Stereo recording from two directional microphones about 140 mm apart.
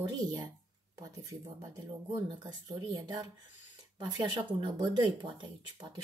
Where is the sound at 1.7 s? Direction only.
30° right (ahead or behind).